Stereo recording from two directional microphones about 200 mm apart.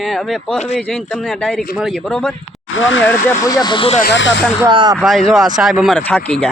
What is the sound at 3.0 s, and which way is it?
Speech, 10° left (ahead or behind).